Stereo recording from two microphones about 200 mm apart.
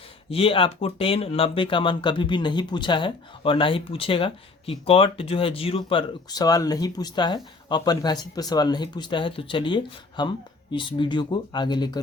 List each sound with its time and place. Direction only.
0.3 s speech: 25° left (ahead or behind)